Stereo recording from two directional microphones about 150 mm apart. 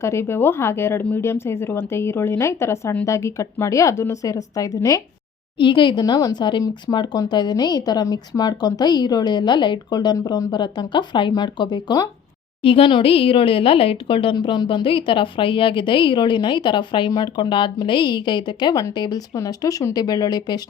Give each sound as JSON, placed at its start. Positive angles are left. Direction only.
{"t": 0.0, "sound": "a woman's voice", "side_deg": 20}
{"t": 5.5, "sound": "a woman's voice", "side_deg": 35}